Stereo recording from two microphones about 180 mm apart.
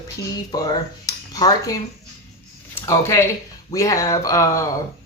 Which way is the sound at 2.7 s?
15° left (ahead or behind).